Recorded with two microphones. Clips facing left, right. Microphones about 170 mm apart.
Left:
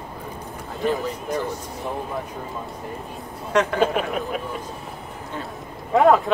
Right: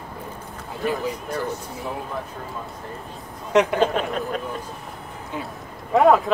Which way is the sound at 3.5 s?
15° right (ahead or behind).